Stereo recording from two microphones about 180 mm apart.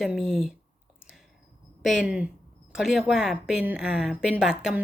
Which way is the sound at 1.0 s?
5° right (ahead or behind).